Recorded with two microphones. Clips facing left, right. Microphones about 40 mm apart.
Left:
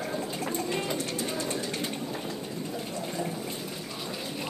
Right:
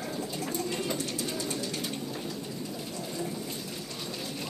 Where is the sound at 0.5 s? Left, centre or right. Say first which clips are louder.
Left 1 dB; left.